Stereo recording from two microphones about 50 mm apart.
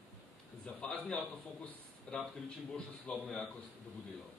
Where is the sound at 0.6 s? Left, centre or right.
Left.